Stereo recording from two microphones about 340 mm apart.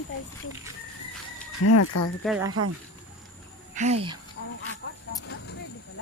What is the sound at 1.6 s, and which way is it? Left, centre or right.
Speech, left.